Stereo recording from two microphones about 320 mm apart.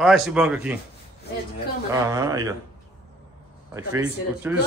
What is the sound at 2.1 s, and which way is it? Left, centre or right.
Speech, centre.